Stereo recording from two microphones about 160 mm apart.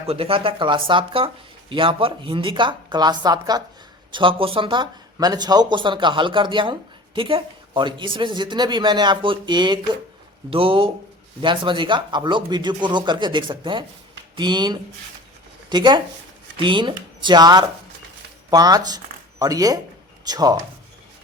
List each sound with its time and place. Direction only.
0.0 s a woman's voice: 40° right (ahead or behind)